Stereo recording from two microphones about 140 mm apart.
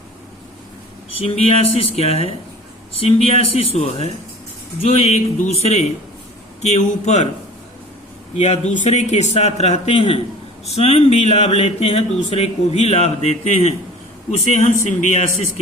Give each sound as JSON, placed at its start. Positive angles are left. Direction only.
{"t": 1.2, "sound": "speech", "side_deg": 45}
{"t": 6.6, "sound": "a man's voice", "side_deg": 55}
{"t": 8.4, "sound": "a man's voice", "side_deg": 50}